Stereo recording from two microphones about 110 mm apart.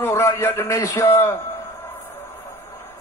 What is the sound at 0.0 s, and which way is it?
A man's voice, 20° left (ahead or behind).